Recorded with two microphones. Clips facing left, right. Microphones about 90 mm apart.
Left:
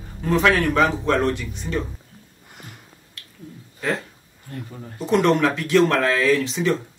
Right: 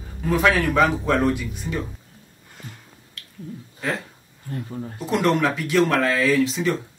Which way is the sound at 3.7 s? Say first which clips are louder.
Left 2 dB; centre (ahead or behind).